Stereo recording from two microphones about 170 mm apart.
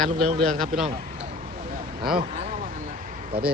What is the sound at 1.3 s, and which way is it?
Vehicle, 50° right (ahead or behind).